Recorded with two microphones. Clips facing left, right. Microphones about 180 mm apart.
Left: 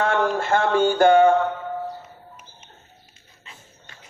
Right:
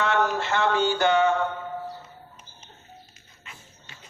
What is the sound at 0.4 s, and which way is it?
Music, 50° left (ahead or behind).